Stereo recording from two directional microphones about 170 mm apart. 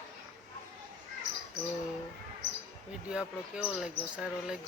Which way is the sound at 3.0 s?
5° right (ahead or behind).